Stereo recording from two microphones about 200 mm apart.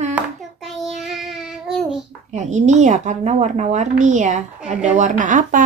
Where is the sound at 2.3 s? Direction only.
35° right (ahead or behind).